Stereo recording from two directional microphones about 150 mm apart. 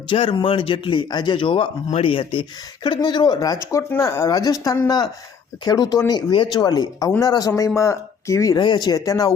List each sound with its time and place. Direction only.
0.1 s speech: 35° left (ahead or behind)